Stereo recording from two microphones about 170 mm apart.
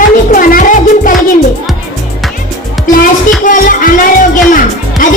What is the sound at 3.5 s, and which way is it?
Music, 55° left (ahead or behind).